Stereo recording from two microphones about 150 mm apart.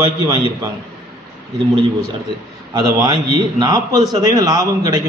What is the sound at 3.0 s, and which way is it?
A man's voice, 25° right (ahead or behind).